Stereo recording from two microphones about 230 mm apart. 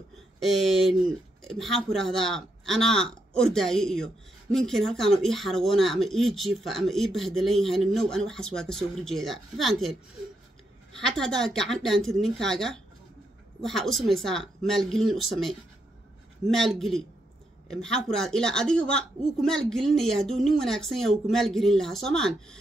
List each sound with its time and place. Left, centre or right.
0.4 s speech: centre
11.1 s speech: centre